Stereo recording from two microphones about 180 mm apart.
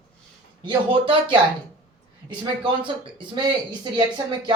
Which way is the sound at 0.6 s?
30° right (ahead or behind).